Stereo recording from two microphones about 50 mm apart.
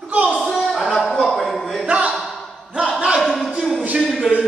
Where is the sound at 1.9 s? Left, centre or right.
Right.